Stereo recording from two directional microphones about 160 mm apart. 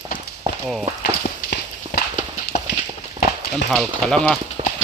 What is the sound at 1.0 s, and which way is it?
Clip-clop, 75° left (ahead or behind).